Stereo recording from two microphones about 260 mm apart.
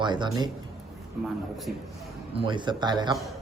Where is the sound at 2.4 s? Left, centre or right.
Centre.